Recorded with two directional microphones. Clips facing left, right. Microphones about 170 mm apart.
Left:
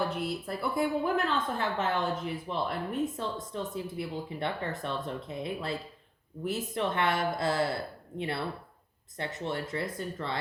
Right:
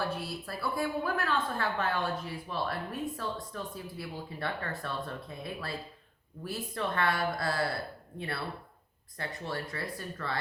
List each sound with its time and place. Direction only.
0.0 s a woman's voice: 20° left (ahead or behind)
9.1 s a woman's voice: 20° left (ahead or behind)